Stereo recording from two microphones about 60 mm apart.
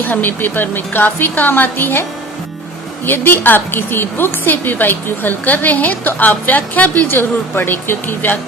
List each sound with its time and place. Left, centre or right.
0.0 s a woman's voice: left
3.1 s a woman's voice: left